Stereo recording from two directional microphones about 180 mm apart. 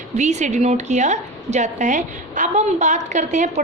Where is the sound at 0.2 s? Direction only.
40° right (ahead or behind).